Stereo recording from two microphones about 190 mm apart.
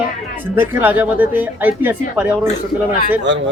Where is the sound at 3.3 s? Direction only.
70° right (ahead or behind).